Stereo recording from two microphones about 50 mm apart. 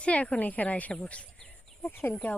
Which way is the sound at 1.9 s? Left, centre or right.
Left.